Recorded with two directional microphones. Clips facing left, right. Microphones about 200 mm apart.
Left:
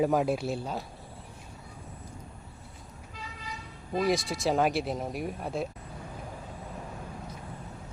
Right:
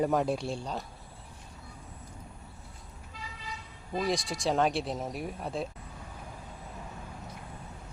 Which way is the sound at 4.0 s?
Centre (ahead or behind).